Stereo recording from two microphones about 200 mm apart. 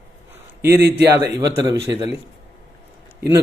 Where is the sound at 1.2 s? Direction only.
15° right (ahead or behind).